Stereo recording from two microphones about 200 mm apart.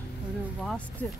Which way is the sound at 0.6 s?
5° left (ahead or behind).